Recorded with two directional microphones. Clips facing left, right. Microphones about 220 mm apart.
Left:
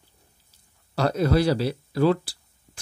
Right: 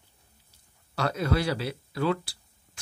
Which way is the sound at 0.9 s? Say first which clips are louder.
Left 6 dB; 35° left (ahead or behind).